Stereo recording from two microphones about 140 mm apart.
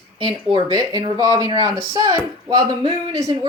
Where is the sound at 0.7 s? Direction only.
30° right (ahead or behind).